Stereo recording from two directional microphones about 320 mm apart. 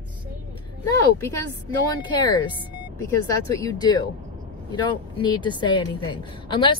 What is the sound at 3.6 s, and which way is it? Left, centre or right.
A woman's voice, centre.